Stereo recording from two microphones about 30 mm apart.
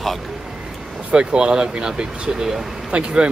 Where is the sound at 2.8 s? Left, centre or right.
Right.